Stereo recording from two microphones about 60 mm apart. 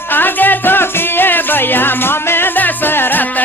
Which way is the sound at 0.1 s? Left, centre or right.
Left.